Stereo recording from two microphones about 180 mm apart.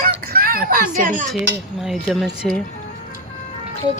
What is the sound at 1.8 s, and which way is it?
Speech, centre (ahead or behind).